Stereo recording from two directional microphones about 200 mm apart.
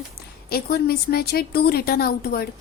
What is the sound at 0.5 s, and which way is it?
A woman's voice, 50° left (ahead or behind).